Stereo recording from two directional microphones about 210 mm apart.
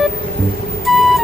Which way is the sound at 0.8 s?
Centre (ahead or behind).